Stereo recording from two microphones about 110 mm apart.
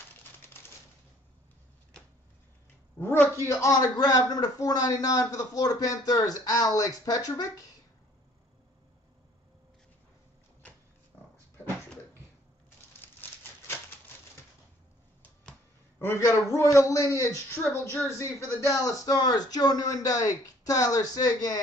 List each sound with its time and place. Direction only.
3.0 s a man's voice: 20° left (ahead or behind)
3.9 s a man's voice: 40° left (ahead or behind)
16.0 s a man's voice: 25° left (ahead or behind)